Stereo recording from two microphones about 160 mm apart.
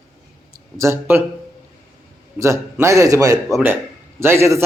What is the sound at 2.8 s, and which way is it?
A man's voice, 20° right (ahead or behind).